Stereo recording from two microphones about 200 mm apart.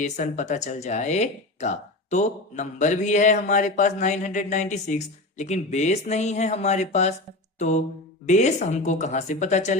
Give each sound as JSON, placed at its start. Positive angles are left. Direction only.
{"t": 0.0, "sound": "speech", "side_deg": 35}
{"t": 8.3, "sound": "speech", "side_deg": 35}